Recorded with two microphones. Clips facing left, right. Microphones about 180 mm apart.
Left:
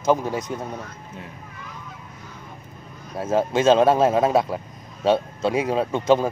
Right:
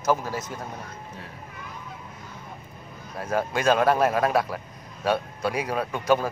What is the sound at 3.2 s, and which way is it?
A man's voice, 25° left (ahead or behind).